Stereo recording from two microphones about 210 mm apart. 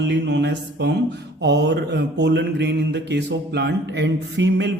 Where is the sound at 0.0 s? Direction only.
55° right (ahead or behind).